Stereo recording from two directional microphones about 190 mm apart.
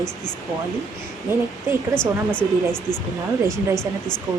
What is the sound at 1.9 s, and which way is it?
Speech, 5° left (ahead or behind).